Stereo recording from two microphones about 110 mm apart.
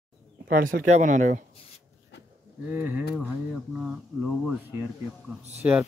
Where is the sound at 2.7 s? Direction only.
15° right (ahead or behind).